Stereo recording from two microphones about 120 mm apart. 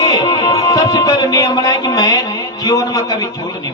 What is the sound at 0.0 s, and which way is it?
Music, 35° left (ahead or behind).